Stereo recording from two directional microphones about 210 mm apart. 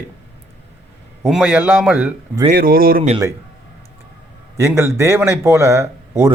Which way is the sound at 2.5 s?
45° right (ahead or behind).